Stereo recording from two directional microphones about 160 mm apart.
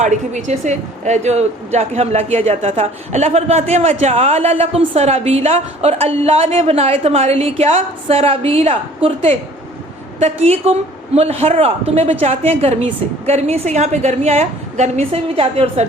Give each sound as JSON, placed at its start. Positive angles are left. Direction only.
{"t": 0.0, "sound": "a woman's voice", "side_deg": -50}